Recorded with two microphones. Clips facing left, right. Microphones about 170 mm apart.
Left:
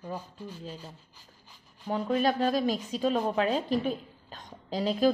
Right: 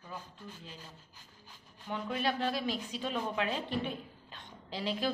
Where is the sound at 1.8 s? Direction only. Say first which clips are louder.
Left 8 dB; 40° left (ahead or behind).